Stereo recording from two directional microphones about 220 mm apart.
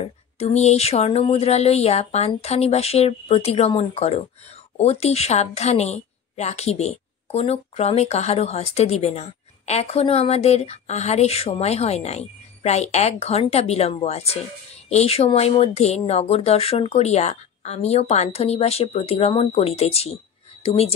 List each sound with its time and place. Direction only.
0.0 s a woman's voice: 30° left (ahead or behind)